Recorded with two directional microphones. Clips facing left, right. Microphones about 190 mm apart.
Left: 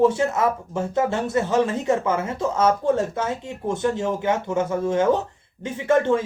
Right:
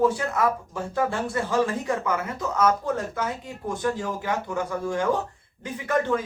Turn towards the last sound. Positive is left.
turn(degrees=25)  # may be behind; listen again after turning